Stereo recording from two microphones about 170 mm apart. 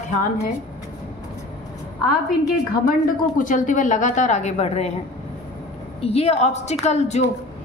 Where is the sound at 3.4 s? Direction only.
50° left (ahead or behind).